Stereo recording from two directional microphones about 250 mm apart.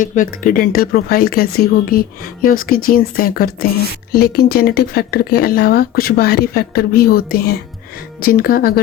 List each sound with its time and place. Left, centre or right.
0.0 s speech: left